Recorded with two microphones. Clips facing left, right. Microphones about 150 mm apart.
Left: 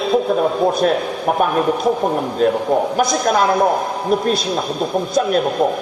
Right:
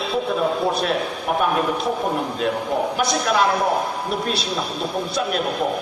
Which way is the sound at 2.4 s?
40° left (ahead or behind).